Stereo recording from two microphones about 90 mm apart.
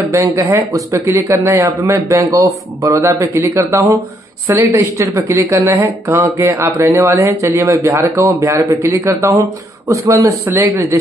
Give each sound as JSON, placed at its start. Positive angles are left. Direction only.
{"t": 0.1, "sound": "speech", "side_deg": -35}